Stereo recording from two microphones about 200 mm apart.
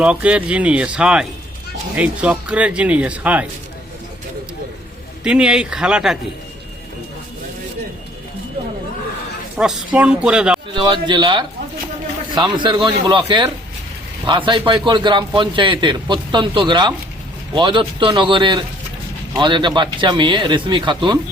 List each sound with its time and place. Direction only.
0.0 s speech: 5° right (ahead or behind)
5.2 s speech: 5° right (ahead or behind)
9.6 s speech: 5° right (ahead or behind)
10.8 s a man's voice: 25° right (ahead or behind)